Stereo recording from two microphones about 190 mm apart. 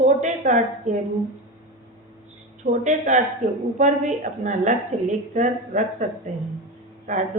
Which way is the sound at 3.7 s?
40° right (ahead or behind).